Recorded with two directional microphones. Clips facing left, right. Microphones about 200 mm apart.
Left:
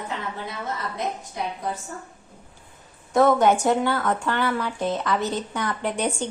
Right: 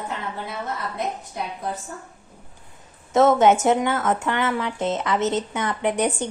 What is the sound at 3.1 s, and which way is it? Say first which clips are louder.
A woman's voice: right 2 dB; 25° right (ahead or behind).